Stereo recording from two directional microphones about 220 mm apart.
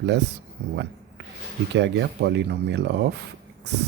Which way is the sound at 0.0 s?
50° right (ahead or behind).